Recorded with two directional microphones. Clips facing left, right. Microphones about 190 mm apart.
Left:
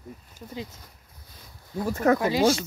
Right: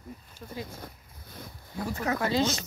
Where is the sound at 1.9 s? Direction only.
50° left (ahead or behind).